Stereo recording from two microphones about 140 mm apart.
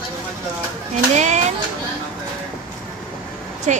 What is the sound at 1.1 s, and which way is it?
Speech, 55° right (ahead or behind).